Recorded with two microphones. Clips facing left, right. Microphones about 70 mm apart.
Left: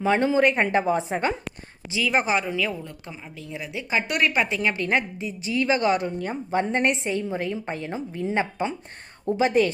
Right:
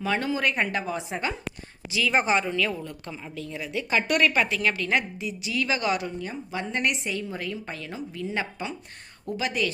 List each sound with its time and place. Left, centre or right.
0.0 s speech: left
2.0 s speech: centre; by 9.7 s left